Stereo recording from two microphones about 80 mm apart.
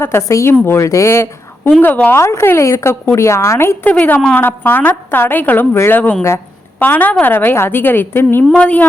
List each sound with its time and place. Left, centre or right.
0.0 s a woman's voice: left
1.8 s a woman's voice: left
2.1 s a woman's voice: left
3.8 s a woman's voice: left
8.5 s a woman's voice: centre